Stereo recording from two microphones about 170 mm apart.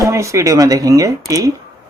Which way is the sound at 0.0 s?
15° right (ahead or behind).